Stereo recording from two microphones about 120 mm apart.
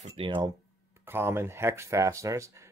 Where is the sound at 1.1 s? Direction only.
20° right (ahead or behind).